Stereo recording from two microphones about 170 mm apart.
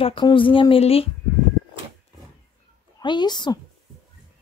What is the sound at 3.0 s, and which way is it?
Speech, 25° left (ahead or behind).